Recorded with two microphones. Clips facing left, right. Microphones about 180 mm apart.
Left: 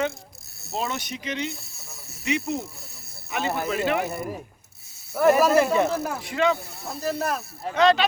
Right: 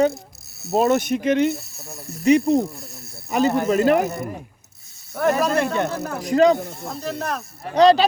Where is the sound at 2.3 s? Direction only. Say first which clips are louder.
Right 11 dB; 45° right (ahead or behind).